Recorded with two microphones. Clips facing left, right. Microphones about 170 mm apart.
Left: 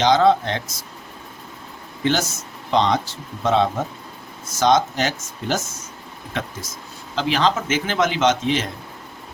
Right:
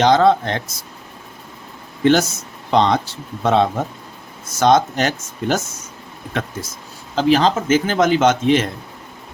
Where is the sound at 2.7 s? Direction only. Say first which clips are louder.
Right 3 dB; 60° right (ahead or behind).